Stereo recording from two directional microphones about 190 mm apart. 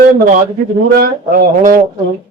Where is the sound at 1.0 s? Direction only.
50° right (ahead or behind).